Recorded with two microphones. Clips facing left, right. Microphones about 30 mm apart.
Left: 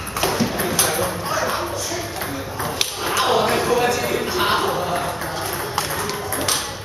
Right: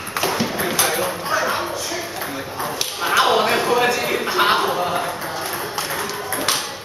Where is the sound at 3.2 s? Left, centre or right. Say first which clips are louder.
Left 1 dB; right.